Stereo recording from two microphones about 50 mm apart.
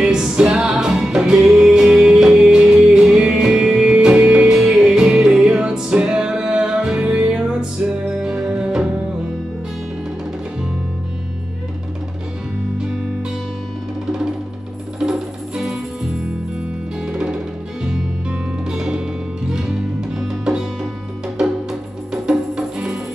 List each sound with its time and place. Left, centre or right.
0.2 s music: centre
4.6 s music: centre
12.7 s music: centre
15.0 s music: centre
17.0 s music: centre
18.7 s music: centre